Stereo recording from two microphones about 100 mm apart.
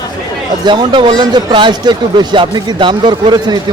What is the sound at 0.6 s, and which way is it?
Speech, 45° right (ahead or behind).